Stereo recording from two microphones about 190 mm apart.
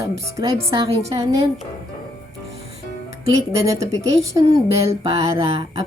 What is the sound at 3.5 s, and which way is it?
A woman's voice, 15° right (ahead or behind).